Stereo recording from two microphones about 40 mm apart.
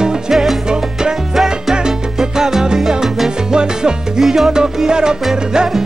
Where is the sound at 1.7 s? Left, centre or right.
Centre.